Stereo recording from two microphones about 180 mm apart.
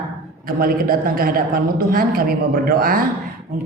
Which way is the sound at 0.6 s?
55° right (ahead or behind).